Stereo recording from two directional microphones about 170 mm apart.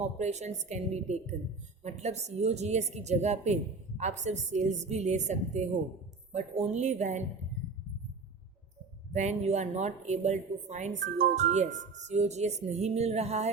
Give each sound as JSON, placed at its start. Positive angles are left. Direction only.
{"t": 0.0, "sound": "a woman's voice", "side_deg": -40}
{"t": 9.1, "sound": "a woman's voice", "side_deg": -40}